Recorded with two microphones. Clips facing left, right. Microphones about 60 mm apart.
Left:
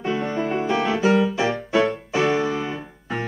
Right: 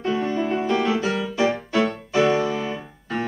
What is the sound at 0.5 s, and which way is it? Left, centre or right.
Music, centre.